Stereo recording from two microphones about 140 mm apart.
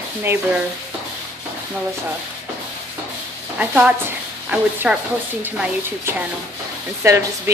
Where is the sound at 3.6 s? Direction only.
10° right (ahead or behind).